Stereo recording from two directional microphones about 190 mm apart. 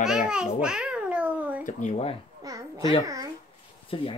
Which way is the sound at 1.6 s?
40° left (ahead or behind).